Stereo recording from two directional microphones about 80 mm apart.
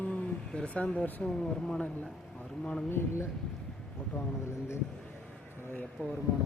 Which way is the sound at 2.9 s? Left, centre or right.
Left.